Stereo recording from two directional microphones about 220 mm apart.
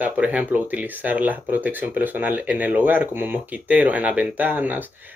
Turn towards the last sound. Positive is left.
turn(degrees=-10)  # may be behind; listen again after turning